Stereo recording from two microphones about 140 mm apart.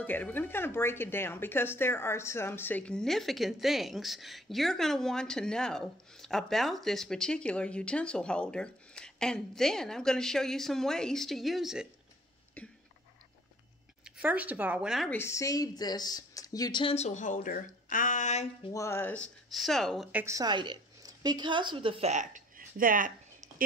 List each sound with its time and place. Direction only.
0.0 s speech: 10° left (ahead or behind); by 11.9 s 5° right (ahead or behind)
14.0 s speech: 10° right (ahead or behind)
15.0 s speech: 15° left (ahead or behind)
16.8 s a woman's voice: 50° left (ahead or behind)
18.7 s speech: 20° left (ahead or behind)
19.5 s speech: centre (ahead or behind)
20.1 s a woman's voice: 10° right (ahead or behind)
20.3 s a woman's voice: 30° right (ahead or behind)
22.1 s speech: 65° right (ahead or behind)